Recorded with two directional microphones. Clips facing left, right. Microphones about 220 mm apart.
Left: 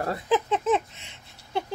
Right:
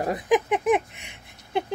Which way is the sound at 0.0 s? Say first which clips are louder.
Right 3 dB; 15° right (ahead or behind).